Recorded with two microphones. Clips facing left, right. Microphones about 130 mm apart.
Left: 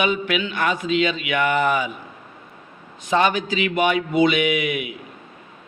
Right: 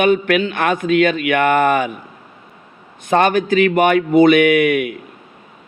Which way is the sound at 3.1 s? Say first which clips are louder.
Right 5 dB; 55° right (ahead or behind).